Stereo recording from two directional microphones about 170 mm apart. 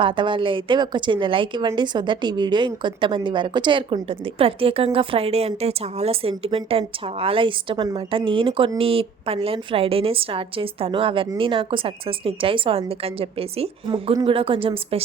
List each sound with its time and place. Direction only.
0.0 s a woman's voice: 30° right (ahead or behind)